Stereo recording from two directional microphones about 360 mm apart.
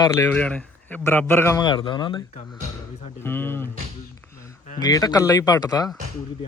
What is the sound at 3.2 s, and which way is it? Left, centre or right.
Speech, centre.